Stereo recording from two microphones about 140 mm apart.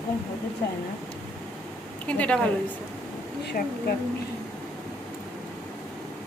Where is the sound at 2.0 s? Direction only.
10° left (ahead or behind).